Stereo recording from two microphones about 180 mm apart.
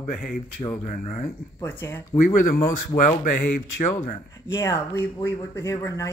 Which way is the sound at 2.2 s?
45° left (ahead or behind).